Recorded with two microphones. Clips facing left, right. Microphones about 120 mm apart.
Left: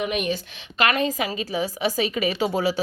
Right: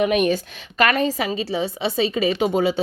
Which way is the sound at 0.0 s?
50° right (ahead or behind).